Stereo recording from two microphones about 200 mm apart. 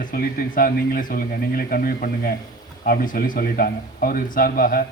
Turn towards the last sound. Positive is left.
turn(degrees=45)  # may be behind; listen again after turning